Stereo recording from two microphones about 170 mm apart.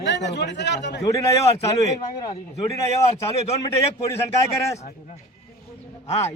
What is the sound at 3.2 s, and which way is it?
Speech, 35° left (ahead or behind).